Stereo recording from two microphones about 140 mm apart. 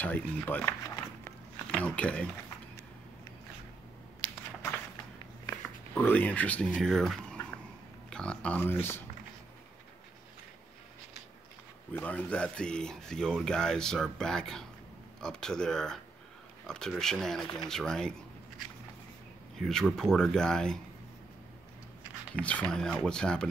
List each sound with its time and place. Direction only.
0.0 s speech: 10° left (ahead or behind)
0.8 s a sound: 25° left (ahead or behind)
1.7 s speech: 10° left (ahead or behind)
5.5 s a sound: 15° left (ahead or behind)
8.1 s speech: 5° left (ahead or behind)
11.9 s speech: 10° left (ahead or behind)
19.6 s speech: 5° left (ahead or behind)
22.3 s speech: 10° left (ahead or behind)